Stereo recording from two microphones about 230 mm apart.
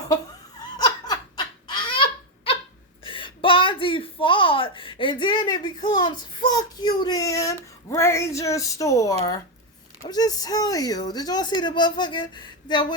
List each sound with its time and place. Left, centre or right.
0.8 s laughter: centre
3.0 s a woman's voice: left